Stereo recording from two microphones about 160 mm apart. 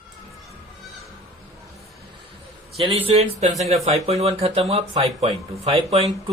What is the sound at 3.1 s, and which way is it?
Speech, 40° right (ahead or behind).